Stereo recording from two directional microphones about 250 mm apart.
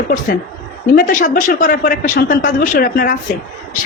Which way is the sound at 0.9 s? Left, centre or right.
Left.